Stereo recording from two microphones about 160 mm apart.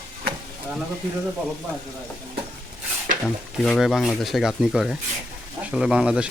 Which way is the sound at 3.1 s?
55° right (ahead or behind).